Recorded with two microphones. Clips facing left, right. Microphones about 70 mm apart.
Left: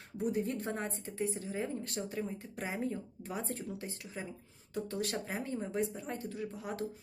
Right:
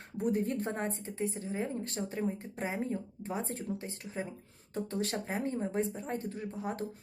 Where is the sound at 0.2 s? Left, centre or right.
Right.